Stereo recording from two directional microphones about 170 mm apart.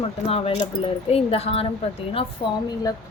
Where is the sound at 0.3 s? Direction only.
35° left (ahead or behind).